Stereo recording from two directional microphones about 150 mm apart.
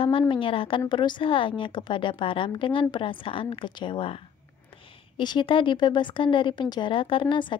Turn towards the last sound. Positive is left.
turn(degrees=35)  # may be behind; listen again after turning